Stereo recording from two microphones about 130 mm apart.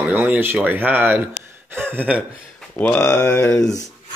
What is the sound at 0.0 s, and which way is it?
Speech, 10° right (ahead or behind).